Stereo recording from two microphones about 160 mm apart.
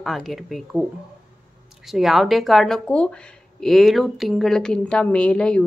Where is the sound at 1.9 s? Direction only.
Centre (ahead or behind).